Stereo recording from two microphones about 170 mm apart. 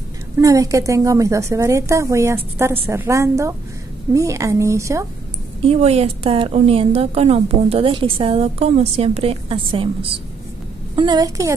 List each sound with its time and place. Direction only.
0.4 s a woman's voice: 20° right (ahead or behind)
5.6 s a woman's voice: 35° right (ahead or behind); by 11.5 s 20° right (ahead or behind)